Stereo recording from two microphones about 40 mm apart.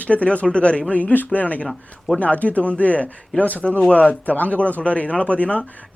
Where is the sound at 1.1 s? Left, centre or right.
Left.